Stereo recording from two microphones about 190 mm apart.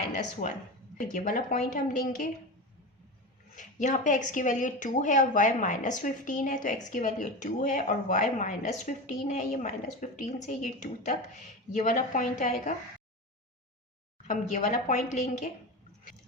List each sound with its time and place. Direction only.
0.4 s a woman's voice: 45° left (ahead or behind)
3.5 s a woman's voice: 40° left (ahead or behind)
14.3 s a woman's voice: 40° left (ahead or behind)